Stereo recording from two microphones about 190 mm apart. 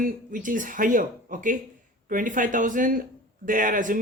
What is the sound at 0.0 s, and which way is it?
Speech, 45° right (ahead or behind).